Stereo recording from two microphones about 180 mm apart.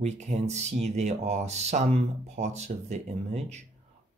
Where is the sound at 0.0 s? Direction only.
40° right (ahead or behind).